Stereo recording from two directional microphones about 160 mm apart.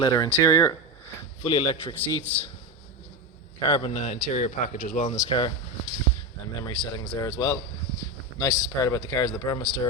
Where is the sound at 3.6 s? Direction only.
30° left (ahead or behind); by 5.2 s 50° left (ahead or behind).